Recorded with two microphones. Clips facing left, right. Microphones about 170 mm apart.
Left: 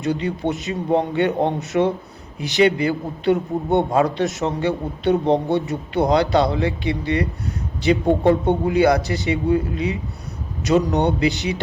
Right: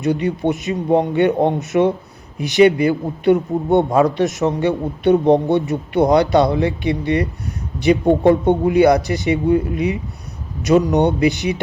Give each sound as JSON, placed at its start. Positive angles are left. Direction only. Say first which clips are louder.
{"t": 0.0, "sound": "speech", "louder": "right 4 dB", "side_deg": -20}